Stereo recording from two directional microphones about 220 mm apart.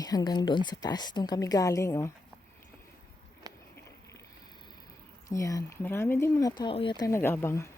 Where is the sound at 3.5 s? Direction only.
15° right (ahead or behind).